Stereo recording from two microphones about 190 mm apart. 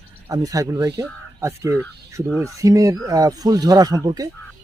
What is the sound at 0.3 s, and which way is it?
Speech, 20° right (ahead or behind).